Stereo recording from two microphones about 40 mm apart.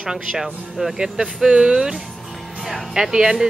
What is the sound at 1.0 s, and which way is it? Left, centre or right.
Speech, centre.